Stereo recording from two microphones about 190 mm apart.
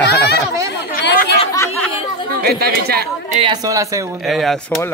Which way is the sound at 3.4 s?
20° right (ahead or behind).